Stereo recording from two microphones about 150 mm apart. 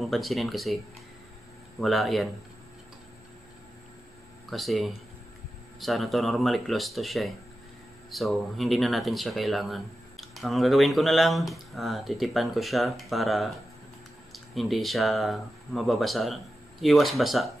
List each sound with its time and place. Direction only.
0.0 s speech: centre (ahead or behind)
1.8 s speech: centre (ahead or behind)
4.5 s speech: centre (ahead or behind)